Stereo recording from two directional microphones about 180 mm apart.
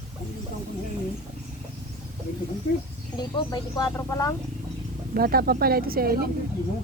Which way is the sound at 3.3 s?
20° left (ahead or behind).